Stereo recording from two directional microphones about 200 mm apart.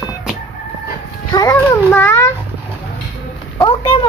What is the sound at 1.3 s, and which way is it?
A child's voice, 20° left (ahead or behind).